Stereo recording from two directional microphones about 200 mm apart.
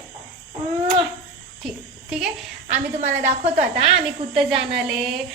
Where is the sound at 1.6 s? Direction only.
Centre (ahead or behind).